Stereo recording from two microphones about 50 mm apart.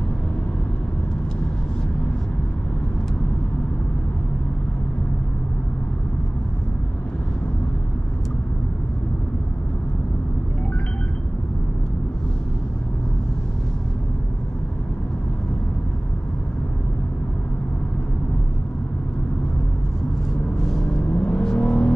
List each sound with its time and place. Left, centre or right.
20.6 s vehicle: centre
21.1 s vehicle: left